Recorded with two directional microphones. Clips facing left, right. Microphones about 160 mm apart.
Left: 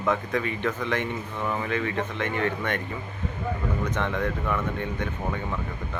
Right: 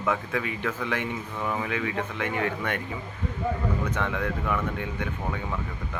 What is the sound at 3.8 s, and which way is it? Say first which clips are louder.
Speech: left 1 dB; 10° right (ahead or behind).